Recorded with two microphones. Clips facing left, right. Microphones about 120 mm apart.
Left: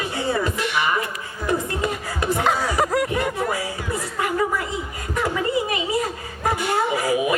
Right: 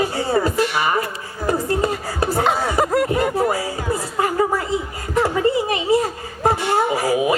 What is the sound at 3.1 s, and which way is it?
Music, 30° right (ahead or behind).